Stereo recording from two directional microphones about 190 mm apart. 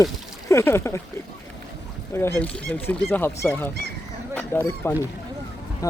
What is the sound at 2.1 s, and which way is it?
Speech, 10° left (ahead or behind).